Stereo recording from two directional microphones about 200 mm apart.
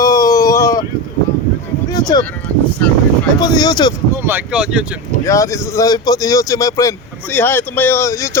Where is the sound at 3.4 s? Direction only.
20° left (ahead or behind).